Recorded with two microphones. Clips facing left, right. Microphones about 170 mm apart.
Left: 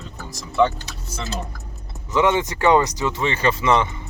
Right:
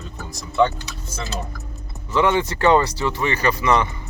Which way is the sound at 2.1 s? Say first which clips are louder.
Even; 20° left (ahead or behind).